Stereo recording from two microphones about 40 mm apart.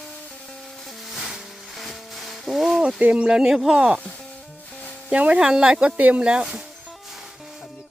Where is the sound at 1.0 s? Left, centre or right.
Centre.